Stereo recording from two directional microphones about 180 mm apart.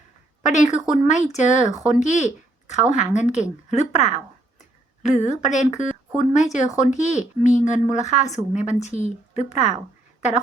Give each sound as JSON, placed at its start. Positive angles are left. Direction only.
{"t": 0.4, "sound": "speech", "side_deg": 40}